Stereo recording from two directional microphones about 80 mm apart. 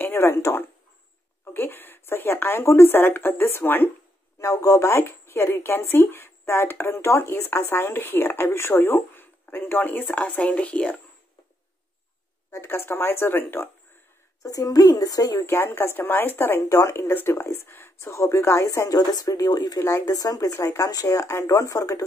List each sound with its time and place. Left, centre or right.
0.0 s a sound: left
1.4 s speech: left
4.4 s speech: left; by 11.0 s centre
12.4 s speech: left
14.4 s speech: left
15.4 s speech: left
18.9 s speech: left
19.8 s speech: left